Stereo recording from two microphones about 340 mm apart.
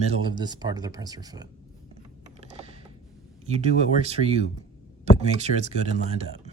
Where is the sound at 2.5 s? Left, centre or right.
Centre.